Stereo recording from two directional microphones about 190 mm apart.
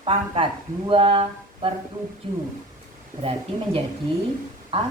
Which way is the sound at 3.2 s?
30° right (ahead or behind).